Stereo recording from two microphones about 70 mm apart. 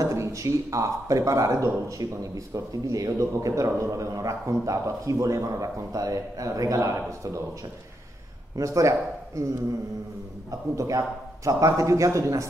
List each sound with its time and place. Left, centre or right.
0.0 s speech: right
8.5 s speech: right
10.8 s speech: right